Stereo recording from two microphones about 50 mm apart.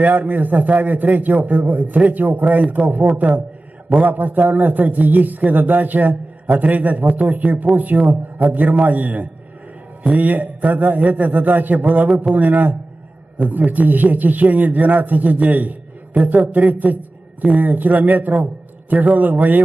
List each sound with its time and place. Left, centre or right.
0.0 s a man's voice: right